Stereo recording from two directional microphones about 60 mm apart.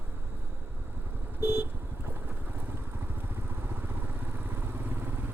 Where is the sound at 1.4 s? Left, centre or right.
Right.